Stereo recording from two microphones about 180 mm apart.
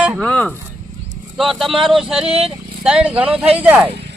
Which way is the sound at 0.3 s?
5° left (ahead or behind).